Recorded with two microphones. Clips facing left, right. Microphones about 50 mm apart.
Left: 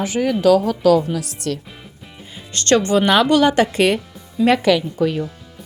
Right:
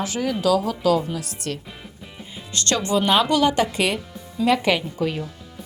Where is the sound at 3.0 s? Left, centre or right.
Left.